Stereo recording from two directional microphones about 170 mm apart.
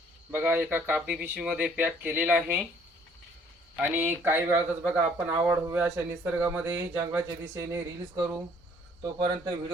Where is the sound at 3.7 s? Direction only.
10° right (ahead or behind).